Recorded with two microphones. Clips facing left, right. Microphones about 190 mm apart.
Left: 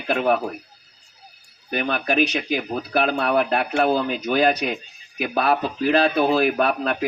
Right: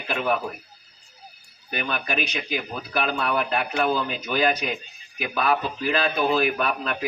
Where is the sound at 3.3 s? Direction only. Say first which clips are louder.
Left 5 dB; 65° left (ahead or behind).